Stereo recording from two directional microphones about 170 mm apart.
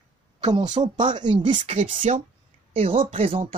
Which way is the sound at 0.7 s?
45° right (ahead or behind).